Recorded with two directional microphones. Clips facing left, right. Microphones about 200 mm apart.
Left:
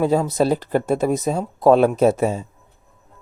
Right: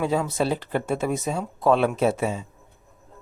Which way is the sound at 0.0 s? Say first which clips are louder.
Left 6 dB; 40° left (ahead or behind).